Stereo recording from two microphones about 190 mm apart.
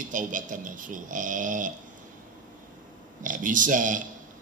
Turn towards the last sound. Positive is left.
turn(degrees=-45)  # may be behind; listen again after turning